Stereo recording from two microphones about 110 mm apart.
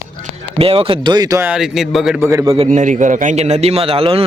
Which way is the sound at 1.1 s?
35° right (ahead or behind).